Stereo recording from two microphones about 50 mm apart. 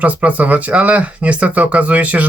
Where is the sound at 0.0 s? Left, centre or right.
Right.